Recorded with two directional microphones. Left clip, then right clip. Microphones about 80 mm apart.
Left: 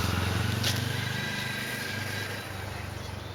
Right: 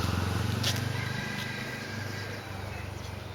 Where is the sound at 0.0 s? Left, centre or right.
Left.